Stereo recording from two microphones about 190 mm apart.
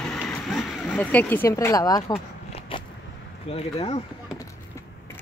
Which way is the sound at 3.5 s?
30° left (ahead or behind).